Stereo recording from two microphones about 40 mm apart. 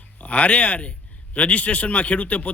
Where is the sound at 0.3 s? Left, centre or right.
Left.